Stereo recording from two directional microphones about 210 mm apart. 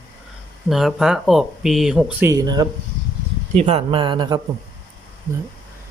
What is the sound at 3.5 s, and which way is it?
Speech, 30° right (ahead or behind).